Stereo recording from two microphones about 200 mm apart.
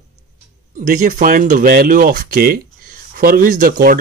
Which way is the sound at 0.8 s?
40° right (ahead or behind).